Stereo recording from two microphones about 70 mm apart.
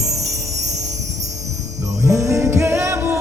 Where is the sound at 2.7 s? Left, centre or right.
Right.